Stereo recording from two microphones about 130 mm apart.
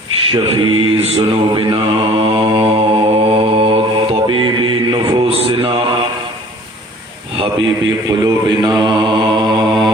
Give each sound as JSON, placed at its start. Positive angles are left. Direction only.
{"t": 0.3, "sound": "mantra", "side_deg": -40}
{"t": 5.3, "sound": "mantra", "side_deg": -45}
{"t": 7.3, "sound": "speech", "side_deg": -45}
{"t": 8.4, "sound": "mantra", "side_deg": -35}